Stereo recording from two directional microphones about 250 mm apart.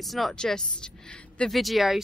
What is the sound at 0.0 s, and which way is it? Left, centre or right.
Speech, centre.